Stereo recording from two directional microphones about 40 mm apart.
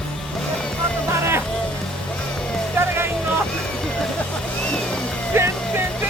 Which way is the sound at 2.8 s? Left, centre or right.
Right.